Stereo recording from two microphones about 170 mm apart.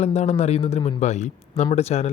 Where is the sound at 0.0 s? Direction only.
40° left (ahead or behind).